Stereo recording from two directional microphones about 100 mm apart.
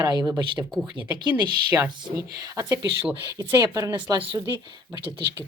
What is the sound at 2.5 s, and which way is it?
Speech, 30° right (ahead or behind).